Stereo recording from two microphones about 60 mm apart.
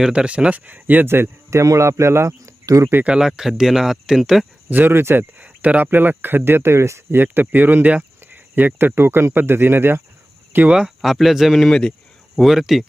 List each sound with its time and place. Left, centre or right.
0.0 s speech: centre; by 1.3 s right
1.8 s speech: right
3.1 s speech: centre
4.7 s speech: right
5.4 s speech: right
7.2 s speech: right
10.7 s speech: centre
11.7 s speech: centre
12.4 s speech: centre